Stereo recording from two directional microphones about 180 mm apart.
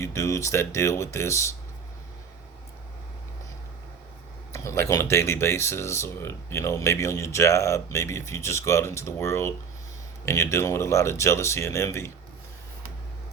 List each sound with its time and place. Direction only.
0.0 s speech: 15° left (ahead or behind)
4.5 s speech: 15° left (ahead or behind)